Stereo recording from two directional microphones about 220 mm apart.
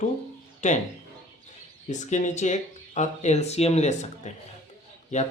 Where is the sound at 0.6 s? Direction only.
35° left (ahead or behind).